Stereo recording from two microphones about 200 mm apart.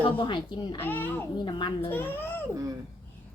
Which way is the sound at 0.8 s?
10° left (ahead or behind).